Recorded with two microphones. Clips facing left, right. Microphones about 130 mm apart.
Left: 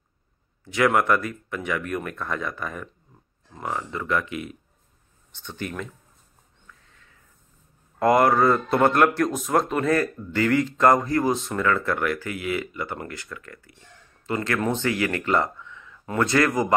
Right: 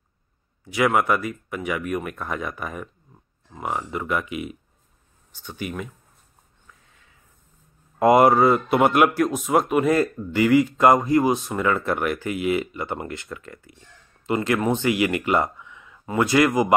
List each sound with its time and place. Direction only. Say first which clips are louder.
0.7 s speech: even; 5° right (ahead or behind)
8.0 s speech: right 3 dB; 20° right (ahead or behind)